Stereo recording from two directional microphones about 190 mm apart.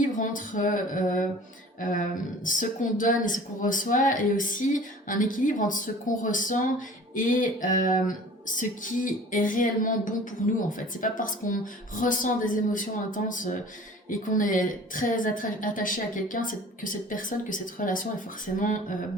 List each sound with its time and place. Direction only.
0.2 s speech: 45° left (ahead or behind)